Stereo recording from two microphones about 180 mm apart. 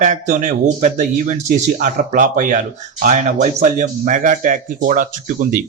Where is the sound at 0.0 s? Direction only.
45° right (ahead or behind).